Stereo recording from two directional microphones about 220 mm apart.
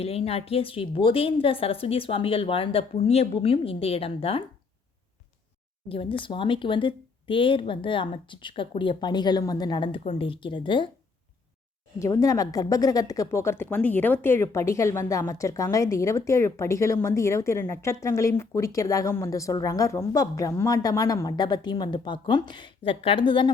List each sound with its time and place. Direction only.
0.0 s speech: 25° left (ahead or behind)
5.9 s speech: 25° left (ahead or behind)
11.9 s speech: 15° left (ahead or behind)